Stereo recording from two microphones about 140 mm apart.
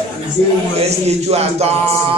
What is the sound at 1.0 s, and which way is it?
Music, 50° right (ahead or behind).